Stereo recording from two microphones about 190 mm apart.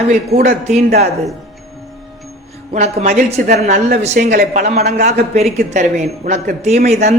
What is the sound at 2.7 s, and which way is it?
A man's voice, 35° right (ahead or behind).